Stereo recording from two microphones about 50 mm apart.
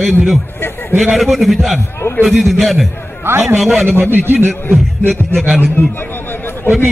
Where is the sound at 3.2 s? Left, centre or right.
Right.